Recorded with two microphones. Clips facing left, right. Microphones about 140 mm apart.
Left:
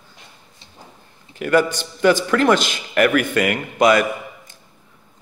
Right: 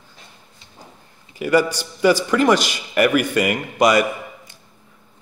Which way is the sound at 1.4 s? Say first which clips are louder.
Even; 10° right (ahead or behind).